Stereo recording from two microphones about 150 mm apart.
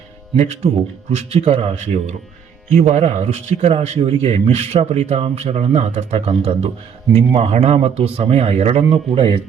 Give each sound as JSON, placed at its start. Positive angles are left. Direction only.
{"t": 0.3, "sound": "a man's voice", "side_deg": -50}